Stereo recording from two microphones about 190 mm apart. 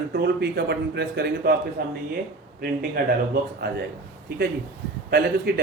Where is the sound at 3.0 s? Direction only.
55° right (ahead or behind).